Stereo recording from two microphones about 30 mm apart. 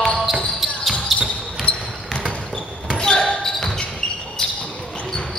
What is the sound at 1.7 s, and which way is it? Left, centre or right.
Basketball bounce, left.